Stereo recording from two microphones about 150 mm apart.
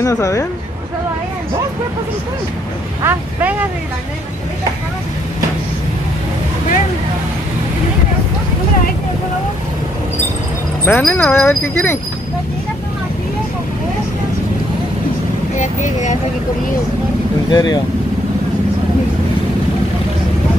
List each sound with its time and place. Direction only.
0.0 s speech: 20° left (ahead or behind)
3.0 s speech: 10° right (ahead or behind)
10.9 s speech: 15° left (ahead or behind)
15.5 s speech: 55° left (ahead or behind)
17.5 s speech: 30° left (ahead or behind)